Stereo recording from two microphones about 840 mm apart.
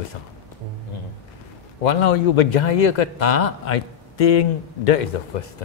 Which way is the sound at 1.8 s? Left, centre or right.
Left.